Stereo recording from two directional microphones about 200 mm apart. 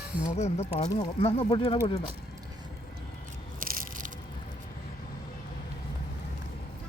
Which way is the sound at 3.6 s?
45° right (ahead or behind).